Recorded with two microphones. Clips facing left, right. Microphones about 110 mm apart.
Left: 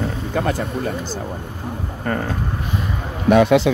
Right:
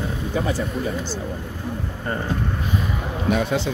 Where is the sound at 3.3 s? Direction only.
90° left.